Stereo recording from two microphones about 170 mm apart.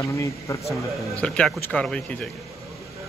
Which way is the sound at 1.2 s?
5° left (ahead or behind).